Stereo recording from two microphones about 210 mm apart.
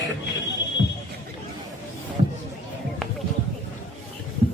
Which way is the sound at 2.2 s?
35° right (ahead or behind).